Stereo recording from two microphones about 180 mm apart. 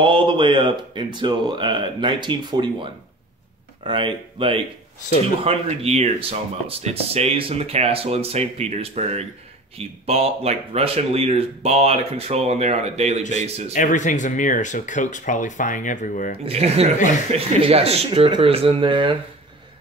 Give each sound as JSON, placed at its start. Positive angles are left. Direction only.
{"t": 0.0, "sound": "speech", "side_deg": -25}
{"t": 13.7, "sound": "speech", "side_deg": 45}
{"t": 16.4, "sound": "speech", "side_deg": -35}